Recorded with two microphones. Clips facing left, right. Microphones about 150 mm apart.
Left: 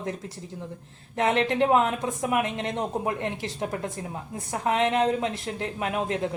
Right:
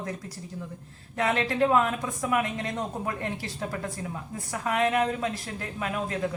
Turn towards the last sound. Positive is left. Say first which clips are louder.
# left 3 dB
turn(degrees=25)  # may be behind; listen again after turning